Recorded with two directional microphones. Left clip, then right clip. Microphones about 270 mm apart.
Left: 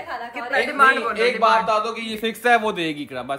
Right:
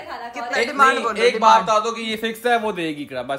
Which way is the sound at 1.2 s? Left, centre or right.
Right.